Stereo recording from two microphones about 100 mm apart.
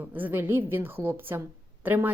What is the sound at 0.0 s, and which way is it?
A woman's voice, 15° right (ahead or behind).